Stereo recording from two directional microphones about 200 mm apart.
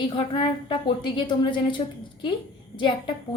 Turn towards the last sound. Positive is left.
turn(degrees=25)  # may be behind; listen again after turning